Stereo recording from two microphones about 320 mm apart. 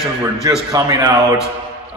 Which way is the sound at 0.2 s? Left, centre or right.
Centre.